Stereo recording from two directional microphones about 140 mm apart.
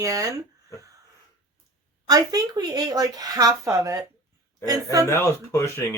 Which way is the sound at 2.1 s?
25° right (ahead or behind).